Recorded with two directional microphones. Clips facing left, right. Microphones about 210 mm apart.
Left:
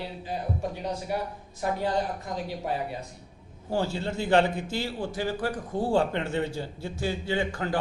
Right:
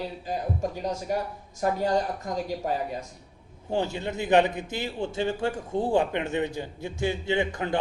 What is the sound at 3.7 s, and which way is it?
A man's voice, 20° right (ahead or behind).